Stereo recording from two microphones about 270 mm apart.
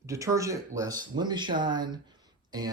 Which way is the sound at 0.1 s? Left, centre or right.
Centre.